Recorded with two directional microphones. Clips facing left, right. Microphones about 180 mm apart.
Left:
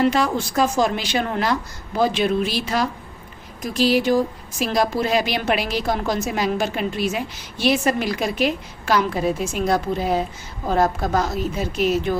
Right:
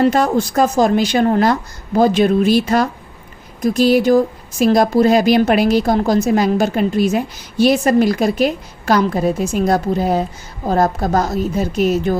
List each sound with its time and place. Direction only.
0.0 s a woman's voice: 40° right (ahead or behind)